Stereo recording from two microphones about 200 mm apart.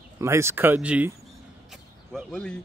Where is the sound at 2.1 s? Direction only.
5° left (ahead or behind).